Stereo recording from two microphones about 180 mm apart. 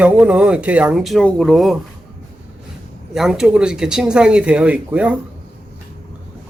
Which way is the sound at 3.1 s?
5° right (ahead or behind).